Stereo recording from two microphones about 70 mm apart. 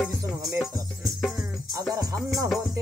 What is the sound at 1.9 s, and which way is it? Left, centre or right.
Music, right.